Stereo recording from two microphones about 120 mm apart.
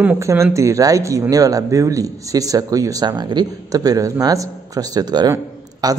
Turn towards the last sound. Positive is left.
turn(degrees=-30)  # may be behind; listen again after turning